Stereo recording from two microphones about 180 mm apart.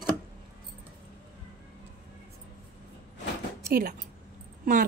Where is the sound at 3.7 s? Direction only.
60° right (ahead or behind).